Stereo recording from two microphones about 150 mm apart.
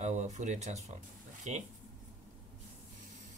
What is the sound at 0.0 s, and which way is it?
Speech, 50° right (ahead or behind).